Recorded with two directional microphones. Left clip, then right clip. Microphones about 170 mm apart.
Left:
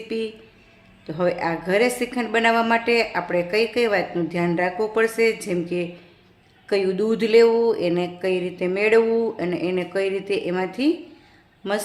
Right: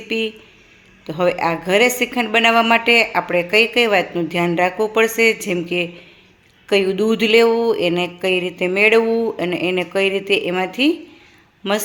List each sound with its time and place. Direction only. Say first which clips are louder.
0.1 s a woman's voice: right 6 dB; 15° right (ahead or behind)